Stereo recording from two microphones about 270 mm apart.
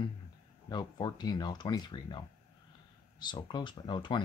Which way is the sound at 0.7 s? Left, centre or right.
Centre.